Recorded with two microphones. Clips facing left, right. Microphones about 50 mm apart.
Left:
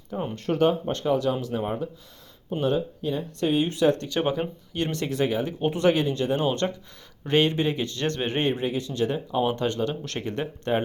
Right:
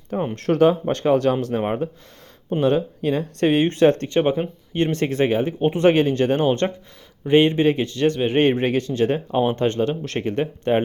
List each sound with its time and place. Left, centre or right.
0.3 s speech: right
2.5 s speech: right
4.2 s speech: right
6.4 s speech: right
8.4 s speech: right
8.9 s speech: right